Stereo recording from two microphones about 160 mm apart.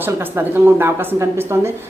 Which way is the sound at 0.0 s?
10° right (ahead or behind).